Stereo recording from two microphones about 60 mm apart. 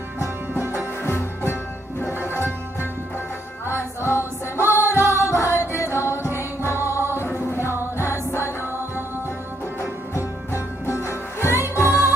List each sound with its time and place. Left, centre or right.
1.0 s music: left
3.6 s music: left
9.8 s music: left